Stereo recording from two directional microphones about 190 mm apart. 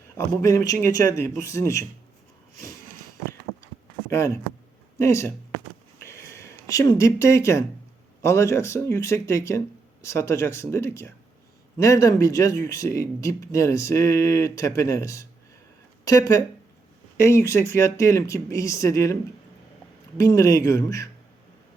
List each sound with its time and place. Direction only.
0.2 s speech: 15° left (ahead or behind)
4.9 s speech: 15° left (ahead or behind)
6.0 s a sound: 15° left (ahead or behind)
8.2 s speech: 15° left (ahead or behind)
20.1 s speech: 15° left (ahead or behind)